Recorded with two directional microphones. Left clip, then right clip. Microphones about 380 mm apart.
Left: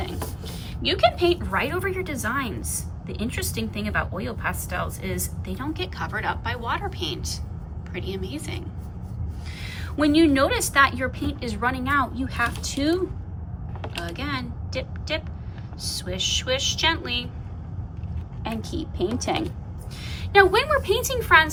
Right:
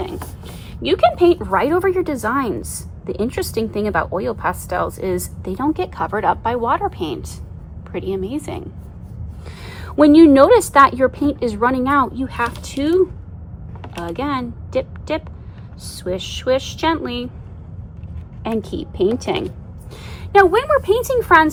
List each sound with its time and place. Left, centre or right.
0.5 s a woman's voice: centre
10.3 s a woman's voice: centre
14.2 s a woman's voice: centre
18.6 s a woman's voice: centre
21.0 s a woman's voice: centre